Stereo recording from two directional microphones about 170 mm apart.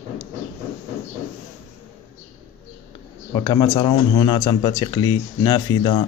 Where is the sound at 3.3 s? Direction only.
20° left (ahead or behind).